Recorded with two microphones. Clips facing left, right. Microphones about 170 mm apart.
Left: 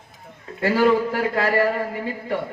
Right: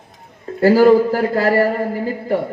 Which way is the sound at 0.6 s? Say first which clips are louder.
Right 8 dB; 35° right (ahead or behind).